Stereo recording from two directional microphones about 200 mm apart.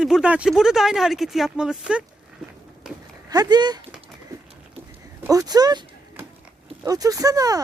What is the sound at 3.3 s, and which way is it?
Speech, 20° right (ahead or behind).